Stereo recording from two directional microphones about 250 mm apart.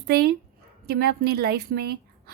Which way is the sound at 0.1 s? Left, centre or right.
Right.